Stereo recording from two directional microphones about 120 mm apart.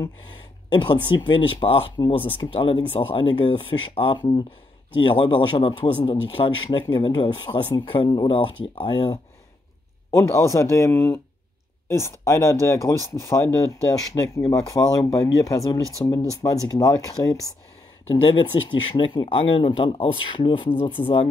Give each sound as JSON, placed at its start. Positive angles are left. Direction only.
{"t": 0.7, "sound": "speech", "side_deg": 40}
{"t": 10.1, "sound": "speech", "side_deg": 25}
{"t": 18.1, "sound": "speech", "side_deg": 40}